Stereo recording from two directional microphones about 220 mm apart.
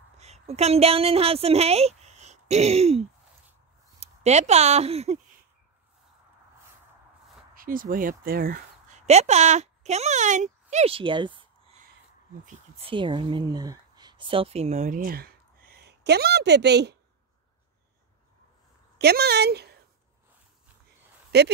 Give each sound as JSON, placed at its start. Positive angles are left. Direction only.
{"t": 0.2, "sound": "a woman's voice", "side_deg": -30}
{"t": 7.5, "sound": "speech", "side_deg": -40}
{"t": 18.9, "sound": "a woman's voice", "side_deg": -45}
{"t": 21.3, "sound": "speech", "side_deg": -50}